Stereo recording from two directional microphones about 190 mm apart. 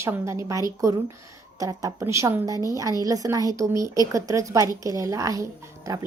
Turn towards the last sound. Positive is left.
turn(degrees=-15)  # may be behind; listen again after turning